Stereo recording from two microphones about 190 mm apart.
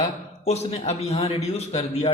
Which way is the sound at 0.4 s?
35° left (ahead or behind).